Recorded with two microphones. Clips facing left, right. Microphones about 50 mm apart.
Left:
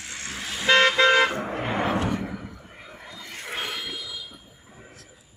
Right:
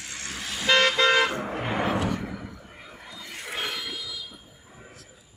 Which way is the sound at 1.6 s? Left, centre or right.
Left.